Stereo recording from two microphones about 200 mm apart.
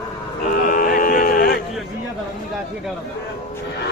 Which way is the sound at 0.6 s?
40° left (ahead or behind).